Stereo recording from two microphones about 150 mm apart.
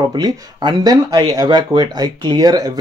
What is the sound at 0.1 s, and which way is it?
Speech, 30° right (ahead or behind).